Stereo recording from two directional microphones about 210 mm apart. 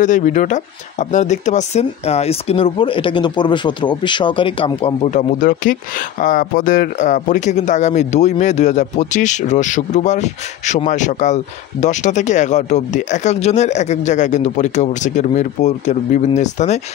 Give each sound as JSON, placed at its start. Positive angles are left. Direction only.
{"t": 0.0, "sound": "speech", "side_deg": 35}
{"t": 5.4, "sound": "speech", "side_deg": 40}